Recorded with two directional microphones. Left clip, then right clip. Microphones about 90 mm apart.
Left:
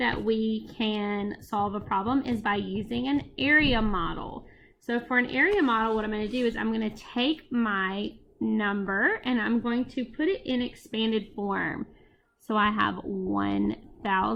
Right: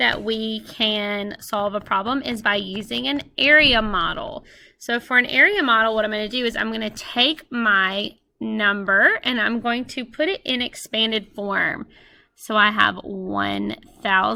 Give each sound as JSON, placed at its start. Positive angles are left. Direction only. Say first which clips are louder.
{"t": 0.0, "sound": "speech", "louder": "right 6 dB", "side_deg": -20}